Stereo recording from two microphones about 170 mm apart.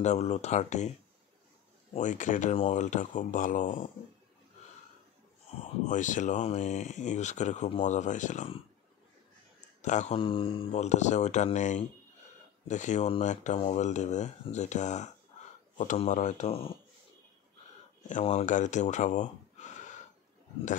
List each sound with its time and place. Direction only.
0.0 s speech: 40° left (ahead or behind)
2.0 s speech: 45° left (ahead or behind)
5.9 s speech: 45° left (ahead or behind)
9.8 s speech: 45° left (ahead or behind)
18.3 s speech: 45° left (ahead or behind)